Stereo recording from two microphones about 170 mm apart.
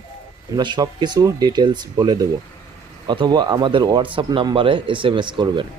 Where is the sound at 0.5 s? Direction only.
25° right (ahead or behind).